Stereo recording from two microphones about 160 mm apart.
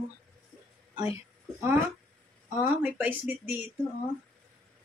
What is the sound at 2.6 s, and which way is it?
Speech, 10° right (ahead or behind).